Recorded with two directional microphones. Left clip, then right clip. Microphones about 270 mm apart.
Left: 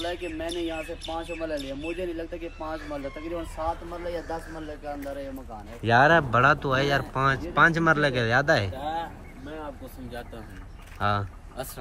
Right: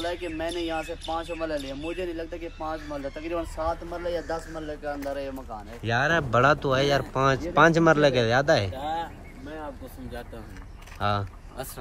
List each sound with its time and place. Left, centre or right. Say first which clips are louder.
0.0 s speech: right 1 dB; centre
3.5 s speech: right 1 dB; right
5.8 s speech: left 5 dB; centre
11.0 s speech: left 1 dB; centre